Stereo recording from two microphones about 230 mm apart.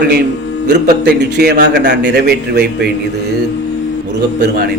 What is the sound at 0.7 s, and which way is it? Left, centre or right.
A man's voice, right.